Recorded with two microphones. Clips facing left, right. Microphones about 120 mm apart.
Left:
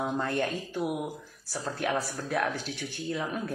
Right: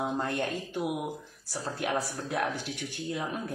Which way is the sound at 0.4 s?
20° right (ahead or behind).